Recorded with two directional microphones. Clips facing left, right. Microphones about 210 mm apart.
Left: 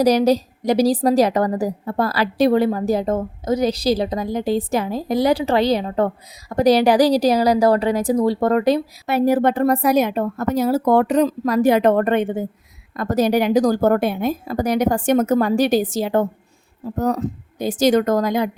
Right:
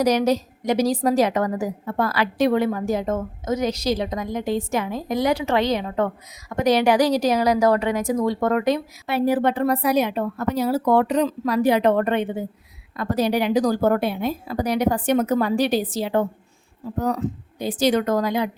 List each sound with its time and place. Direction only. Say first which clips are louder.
0.0 s a woman's voice: left 4 dB; 35° left (ahead or behind)